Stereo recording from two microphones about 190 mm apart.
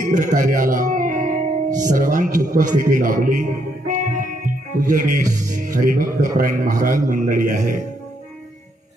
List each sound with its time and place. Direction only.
0.0 s a man's voice: 45° right (ahead or behind)